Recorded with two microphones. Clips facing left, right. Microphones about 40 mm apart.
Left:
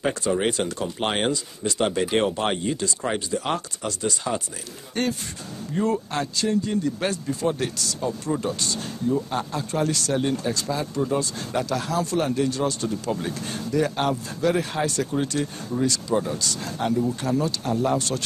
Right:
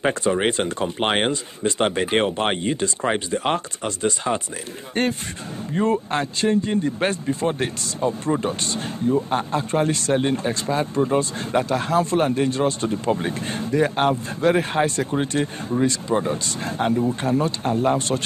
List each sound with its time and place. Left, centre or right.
0.0 s speech: right
5.8 s speech: right